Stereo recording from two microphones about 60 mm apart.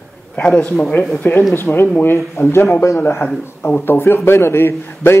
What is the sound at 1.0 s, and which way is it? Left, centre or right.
A man's voice, left.